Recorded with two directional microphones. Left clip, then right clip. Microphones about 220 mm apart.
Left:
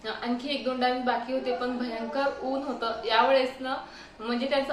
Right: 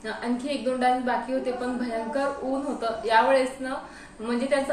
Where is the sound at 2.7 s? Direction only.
5° left (ahead or behind).